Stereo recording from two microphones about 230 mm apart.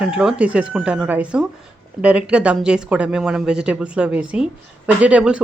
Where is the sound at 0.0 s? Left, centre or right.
Centre.